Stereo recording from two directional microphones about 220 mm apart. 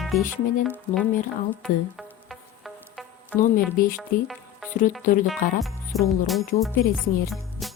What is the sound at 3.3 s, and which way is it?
Speech, 40° left (ahead or behind).